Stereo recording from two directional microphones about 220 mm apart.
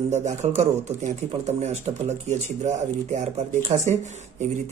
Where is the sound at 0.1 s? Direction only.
30° right (ahead or behind).